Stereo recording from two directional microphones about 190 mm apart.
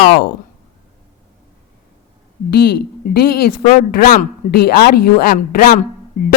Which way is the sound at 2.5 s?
55° left (ahead or behind).